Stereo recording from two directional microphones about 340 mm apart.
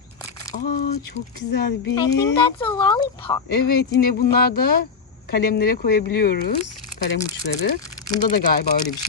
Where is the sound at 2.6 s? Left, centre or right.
Centre.